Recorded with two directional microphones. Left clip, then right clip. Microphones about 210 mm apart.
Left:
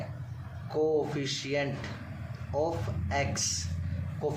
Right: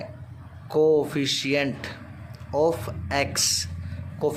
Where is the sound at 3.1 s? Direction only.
50° right (ahead or behind).